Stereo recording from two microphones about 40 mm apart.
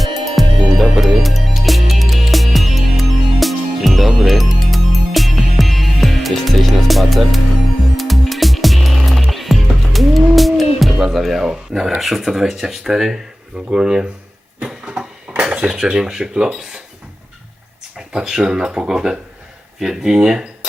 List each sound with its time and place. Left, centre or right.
0.0 s music: centre
11.1 s a sound: centre
11.9 s speech: centre
13.7 s speech: centre
14.8 s dishes: right
18.1 s speech: centre